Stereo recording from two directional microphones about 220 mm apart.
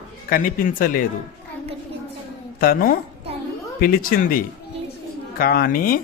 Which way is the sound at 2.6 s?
40° left (ahead or behind).